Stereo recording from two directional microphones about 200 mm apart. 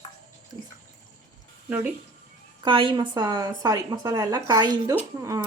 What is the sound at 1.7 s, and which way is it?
Speech, 10° right (ahead or behind).